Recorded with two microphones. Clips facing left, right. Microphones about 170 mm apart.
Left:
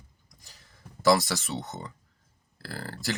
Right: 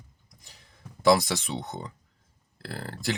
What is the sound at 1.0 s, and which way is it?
Speech, centre (ahead or behind).